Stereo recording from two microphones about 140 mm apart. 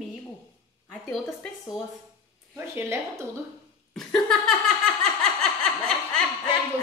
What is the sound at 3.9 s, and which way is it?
Speech, 5° left (ahead or behind).